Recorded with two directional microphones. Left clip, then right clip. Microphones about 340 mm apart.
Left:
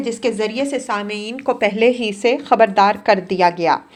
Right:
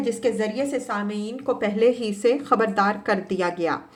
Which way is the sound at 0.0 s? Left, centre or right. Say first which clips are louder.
Left 3 dB; centre.